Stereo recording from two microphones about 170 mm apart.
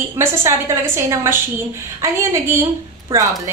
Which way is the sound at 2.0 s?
15° right (ahead or behind).